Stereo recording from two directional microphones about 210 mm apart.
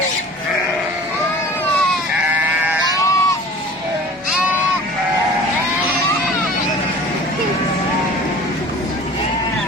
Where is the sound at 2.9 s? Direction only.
15° left (ahead or behind).